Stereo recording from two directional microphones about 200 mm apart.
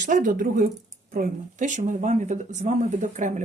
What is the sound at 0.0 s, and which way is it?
Speech, 40° right (ahead or behind).